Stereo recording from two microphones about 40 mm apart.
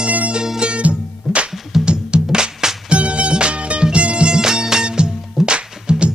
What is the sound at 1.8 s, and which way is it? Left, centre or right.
Music, right.